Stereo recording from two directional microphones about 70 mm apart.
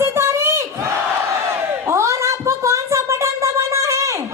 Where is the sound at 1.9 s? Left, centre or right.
Right.